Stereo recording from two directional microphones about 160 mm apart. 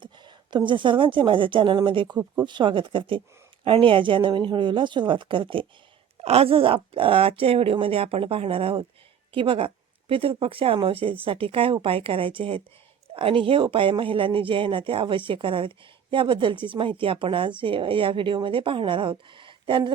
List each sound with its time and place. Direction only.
0.0 s a woman's voice: 30° right (ahead or behind)